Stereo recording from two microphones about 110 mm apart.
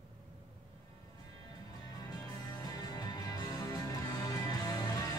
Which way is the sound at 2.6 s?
35° left (ahead or behind).